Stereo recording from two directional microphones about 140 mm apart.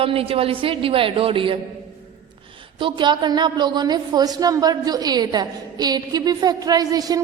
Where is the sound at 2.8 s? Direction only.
35° right (ahead or behind).